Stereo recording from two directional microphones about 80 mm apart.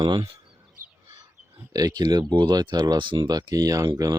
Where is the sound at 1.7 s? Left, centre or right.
Right.